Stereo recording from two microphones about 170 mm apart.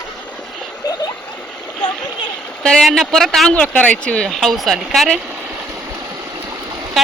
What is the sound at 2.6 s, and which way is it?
Speech, 5° left (ahead or behind).